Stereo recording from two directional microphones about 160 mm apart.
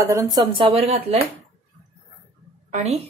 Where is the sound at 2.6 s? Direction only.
45° right (ahead or behind).